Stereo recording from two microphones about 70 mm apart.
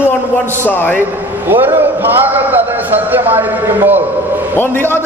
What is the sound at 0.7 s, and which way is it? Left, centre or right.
Speech, left.